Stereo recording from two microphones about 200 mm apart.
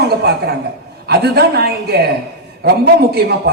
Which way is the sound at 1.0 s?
55° right (ahead or behind).